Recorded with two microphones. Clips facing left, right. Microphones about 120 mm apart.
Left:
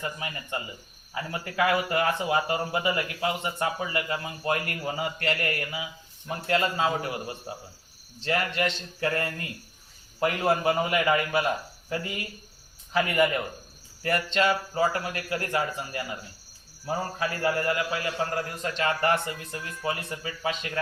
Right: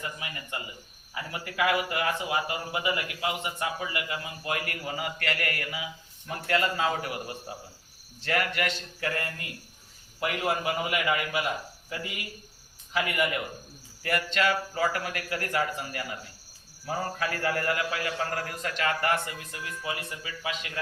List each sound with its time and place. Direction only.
0.0 s a man's voice: 35° left (ahead or behind)